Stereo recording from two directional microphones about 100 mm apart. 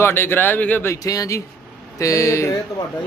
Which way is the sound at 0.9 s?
35° left (ahead or behind).